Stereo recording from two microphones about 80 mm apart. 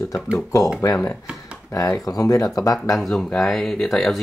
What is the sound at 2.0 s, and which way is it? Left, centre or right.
Speech, left.